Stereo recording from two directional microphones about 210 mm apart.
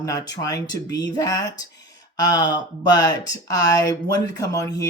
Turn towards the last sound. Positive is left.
turn(degrees=15)  # may be behind; listen again after turning